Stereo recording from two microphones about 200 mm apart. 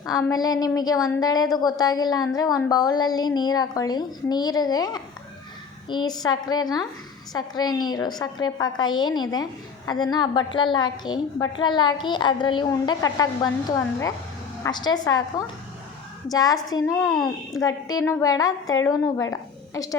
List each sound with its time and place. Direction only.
0.0 s a woman's voice: 20° left (ahead or behind)